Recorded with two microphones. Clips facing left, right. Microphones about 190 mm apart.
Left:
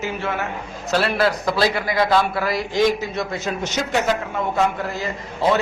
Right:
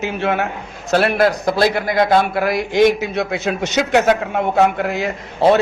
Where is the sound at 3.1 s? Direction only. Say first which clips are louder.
Right 5 dB; 70° right (ahead or behind).